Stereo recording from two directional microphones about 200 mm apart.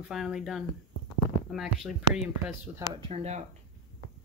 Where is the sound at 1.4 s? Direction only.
Centre (ahead or behind).